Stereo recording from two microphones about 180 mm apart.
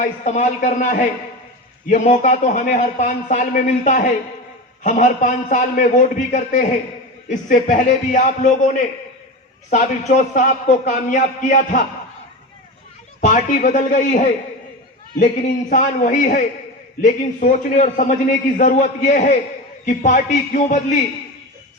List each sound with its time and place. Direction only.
0.3 s a man's voice: 40° left (ahead or behind)
13.2 s a man's voice: 45° left (ahead or behind)